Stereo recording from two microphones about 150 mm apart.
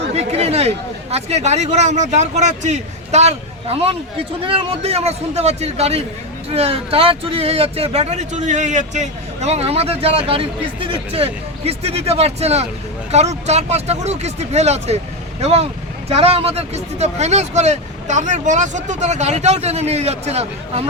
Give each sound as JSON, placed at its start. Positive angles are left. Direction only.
{"t": 0.1, "sound": "speech", "side_deg": -45}